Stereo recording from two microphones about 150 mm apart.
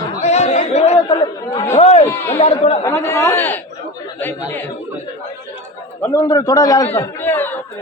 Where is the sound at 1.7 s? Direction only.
45° left (ahead or behind).